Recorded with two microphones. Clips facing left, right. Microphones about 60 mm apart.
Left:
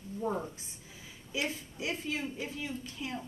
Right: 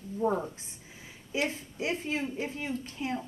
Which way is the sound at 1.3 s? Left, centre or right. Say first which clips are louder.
Right 4 dB; right.